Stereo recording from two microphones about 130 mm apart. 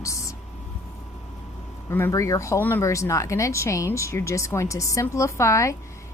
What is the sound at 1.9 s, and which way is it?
A woman's voice, 20° left (ahead or behind).